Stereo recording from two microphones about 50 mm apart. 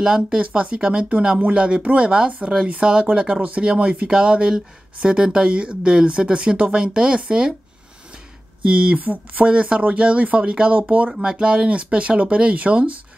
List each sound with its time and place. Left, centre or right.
0.0 s speech: centre
0.4 s speech: right
8.6 s speech: right
9.0 s speech: right
9.5 s speech: right